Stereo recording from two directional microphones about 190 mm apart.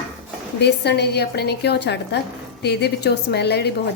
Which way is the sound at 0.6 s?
60° left (ahead or behind).